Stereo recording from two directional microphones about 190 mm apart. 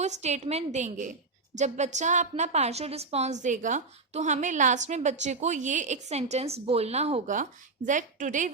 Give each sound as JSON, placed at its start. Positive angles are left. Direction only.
{"t": 0.0, "sound": "a woman's voice", "side_deg": -35}